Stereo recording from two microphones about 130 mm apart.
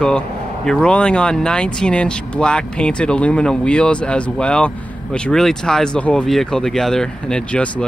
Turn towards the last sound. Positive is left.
turn(degrees=10)  # may be behind; listen again after turning